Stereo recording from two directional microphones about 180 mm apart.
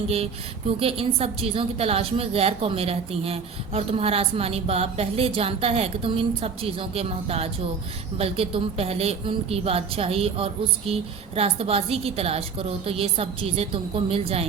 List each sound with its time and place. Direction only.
0.8 s a woman's voice: 30° right (ahead or behind)